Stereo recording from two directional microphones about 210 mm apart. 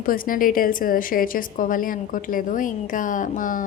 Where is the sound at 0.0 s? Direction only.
40° left (ahead or behind).